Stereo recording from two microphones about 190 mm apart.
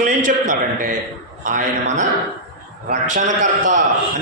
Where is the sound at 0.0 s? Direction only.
45° right (ahead or behind).